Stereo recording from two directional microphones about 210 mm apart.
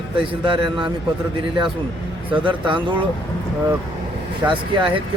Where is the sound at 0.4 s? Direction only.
25° right (ahead or behind).